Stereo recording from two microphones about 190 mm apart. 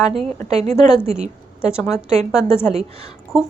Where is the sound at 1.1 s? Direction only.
5° right (ahead or behind).